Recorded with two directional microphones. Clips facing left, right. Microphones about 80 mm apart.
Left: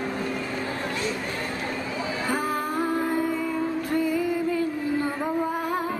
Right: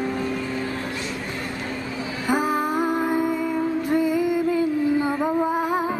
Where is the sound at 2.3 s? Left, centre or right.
Centre.